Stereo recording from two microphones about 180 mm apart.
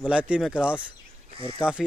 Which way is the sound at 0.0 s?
5° right (ahead or behind).